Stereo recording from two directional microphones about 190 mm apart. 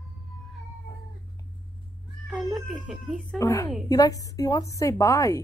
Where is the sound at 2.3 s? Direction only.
Centre (ahead or behind).